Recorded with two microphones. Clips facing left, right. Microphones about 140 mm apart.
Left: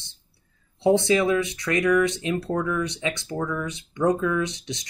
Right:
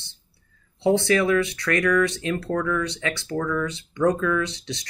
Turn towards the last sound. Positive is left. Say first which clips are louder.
# even
turn(degrees=20)  # may be behind; listen again after turning